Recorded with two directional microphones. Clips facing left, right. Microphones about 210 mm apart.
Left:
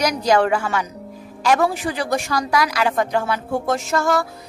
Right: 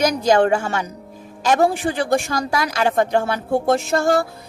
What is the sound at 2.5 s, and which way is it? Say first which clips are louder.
A woman's voice: even; 25° right (ahead or behind).